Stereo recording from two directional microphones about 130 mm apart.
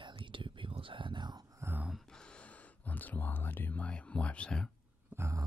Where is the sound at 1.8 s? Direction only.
Centre (ahead or behind).